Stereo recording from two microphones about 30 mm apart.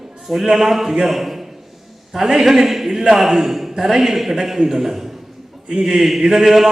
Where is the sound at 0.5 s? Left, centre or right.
Centre.